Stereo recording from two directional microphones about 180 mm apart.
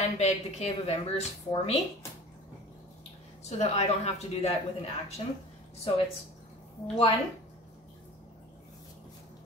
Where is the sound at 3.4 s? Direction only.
40° left (ahead or behind).